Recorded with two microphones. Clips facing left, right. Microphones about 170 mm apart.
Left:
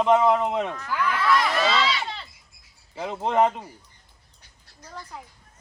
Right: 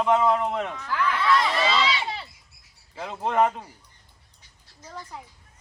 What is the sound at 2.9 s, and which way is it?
Speech, 20° left (ahead or behind).